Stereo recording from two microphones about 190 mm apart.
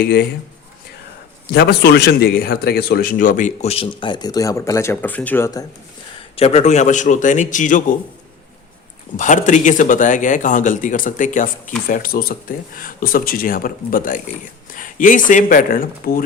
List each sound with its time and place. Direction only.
0.0 s a man's voice: 55° left (ahead or behind)
1.5 s a man's voice: 60° left (ahead or behind); by 5.6 s 10° left (ahead or behind)
6.3 s a man's voice: 35° left (ahead or behind)
9.1 s a man's voice: 40° left (ahead or behind)